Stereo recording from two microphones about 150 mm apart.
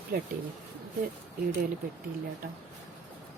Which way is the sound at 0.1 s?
80° right.